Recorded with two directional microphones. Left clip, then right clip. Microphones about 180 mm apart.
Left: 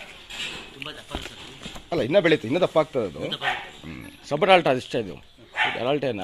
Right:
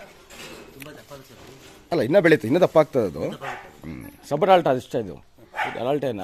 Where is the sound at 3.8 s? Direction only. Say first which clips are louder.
Right 1 dB; 25° right (ahead or behind).